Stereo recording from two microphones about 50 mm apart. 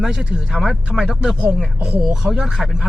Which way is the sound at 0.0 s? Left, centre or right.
Centre.